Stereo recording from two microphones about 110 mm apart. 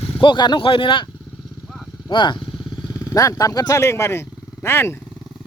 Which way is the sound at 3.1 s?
30° left (ahead or behind).